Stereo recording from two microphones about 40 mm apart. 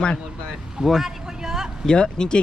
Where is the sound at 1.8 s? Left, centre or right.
Left.